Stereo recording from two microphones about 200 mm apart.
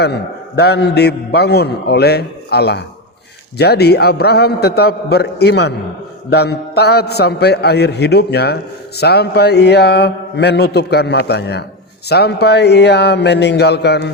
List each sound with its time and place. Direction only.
0.0 s a man's voice: 55° left (ahead or behind)